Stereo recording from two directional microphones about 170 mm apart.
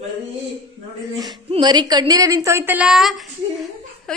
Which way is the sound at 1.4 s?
30° right (ahead or behind).